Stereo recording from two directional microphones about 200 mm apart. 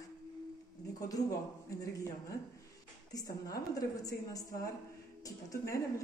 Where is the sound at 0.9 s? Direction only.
20° left (ahead or behind).